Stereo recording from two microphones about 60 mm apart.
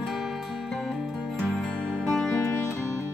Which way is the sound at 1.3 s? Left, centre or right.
Centre.